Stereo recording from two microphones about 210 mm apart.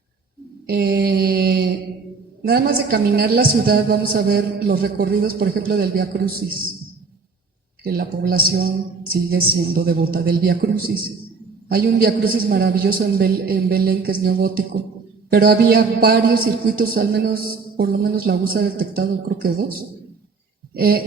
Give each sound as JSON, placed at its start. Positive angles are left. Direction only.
{"t": 0.7, "sound": "mantra", "side_deg": -50}
{"t": 2.4, "sound": "a man's voice", "side_deg": -45}
{"t": 7.9, "sound": "a man's voice", "side_deg": -45}
{"t": 20.7, "sound": "a man's voice", "side_deg": -45}